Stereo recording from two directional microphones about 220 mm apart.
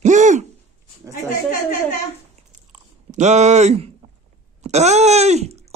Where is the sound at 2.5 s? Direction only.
35° right (ahead or behind).